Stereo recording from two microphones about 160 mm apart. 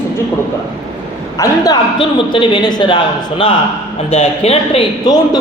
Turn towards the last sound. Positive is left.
turn(degrees=25)  # may be behind; listen again after turning